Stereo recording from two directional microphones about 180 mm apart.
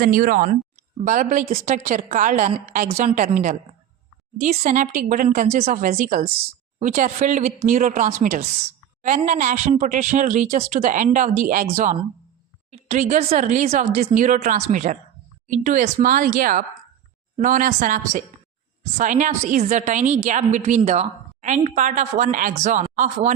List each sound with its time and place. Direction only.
0.0 s a woman's voice: 50° right (ahead or behind)
4.4 s a woman's voice: 40° right (ahead or behind)